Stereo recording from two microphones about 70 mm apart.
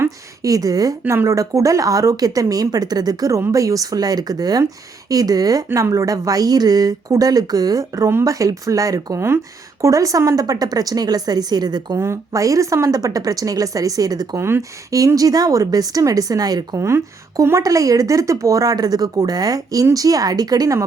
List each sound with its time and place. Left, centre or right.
0.4 s speech: right
1.0 s speech: right
5.7 s a woman's voice: right
11.9 s speech: right
14.3 s speech: right
14.8 s speech: right
17.6 s speech: right